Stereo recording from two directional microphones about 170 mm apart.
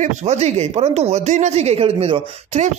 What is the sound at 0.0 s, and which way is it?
A man's voice, 40° right (ahead or behind).